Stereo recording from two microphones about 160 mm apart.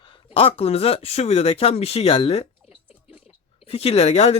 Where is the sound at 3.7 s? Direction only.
35° left (ahead or behind).